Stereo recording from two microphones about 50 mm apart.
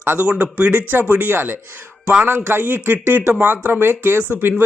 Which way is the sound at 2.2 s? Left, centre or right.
Right.